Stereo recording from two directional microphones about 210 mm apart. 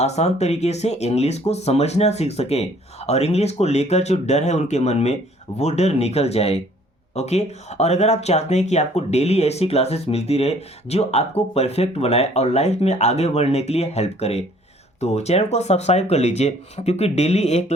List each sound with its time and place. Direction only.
0.0 s speech: 30° left (ahead or behind)